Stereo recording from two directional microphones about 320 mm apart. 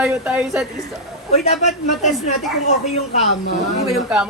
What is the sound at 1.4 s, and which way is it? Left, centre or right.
Speech, left.